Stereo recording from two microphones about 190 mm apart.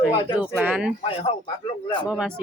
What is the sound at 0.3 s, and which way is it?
Speech, 5° right (ahead or behind).